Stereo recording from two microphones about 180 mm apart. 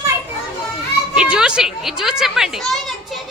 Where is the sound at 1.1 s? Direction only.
5° right (ahead or behind).